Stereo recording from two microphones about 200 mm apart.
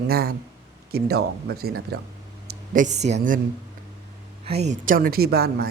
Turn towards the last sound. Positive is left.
turn(degrees=-50)  # may be behind; listen again after turning